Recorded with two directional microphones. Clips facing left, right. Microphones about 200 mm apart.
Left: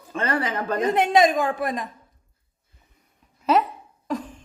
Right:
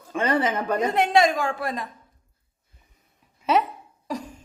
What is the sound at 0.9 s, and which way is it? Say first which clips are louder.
Speech: left 2 dB; 20° left (ahead or behind).